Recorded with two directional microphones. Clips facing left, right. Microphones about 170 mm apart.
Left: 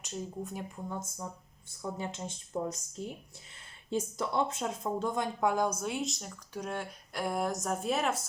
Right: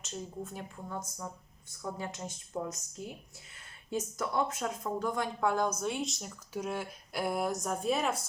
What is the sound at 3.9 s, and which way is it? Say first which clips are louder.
Speech: left 1 dB; 25° left (ahead or behind).